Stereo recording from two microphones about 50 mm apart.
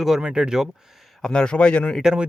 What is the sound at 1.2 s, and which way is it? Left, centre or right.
Speech, centre.